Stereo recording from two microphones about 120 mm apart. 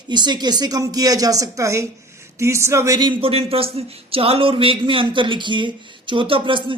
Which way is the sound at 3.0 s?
45° right (ahead or behind).